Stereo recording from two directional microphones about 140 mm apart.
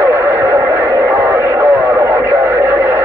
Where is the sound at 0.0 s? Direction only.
15° right (ahead or behind).